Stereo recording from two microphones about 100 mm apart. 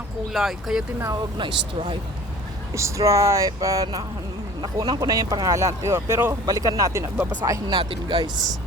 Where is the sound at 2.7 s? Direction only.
30° right (ahead or behind).